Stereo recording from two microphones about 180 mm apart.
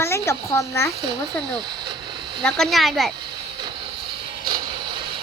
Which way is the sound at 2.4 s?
5° left (ahead or behind).